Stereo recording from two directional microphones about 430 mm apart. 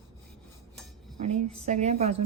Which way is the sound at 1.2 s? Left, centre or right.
Centre.